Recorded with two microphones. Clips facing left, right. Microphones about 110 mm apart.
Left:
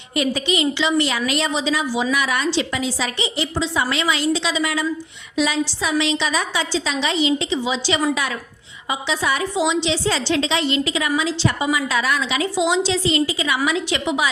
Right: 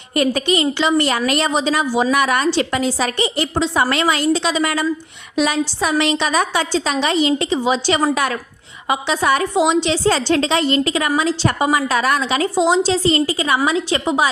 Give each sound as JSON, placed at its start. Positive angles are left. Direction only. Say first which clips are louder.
{"t": 0.1, "sound": "a woman's voice", "louder": "right 4 dB", "side_deg": -50}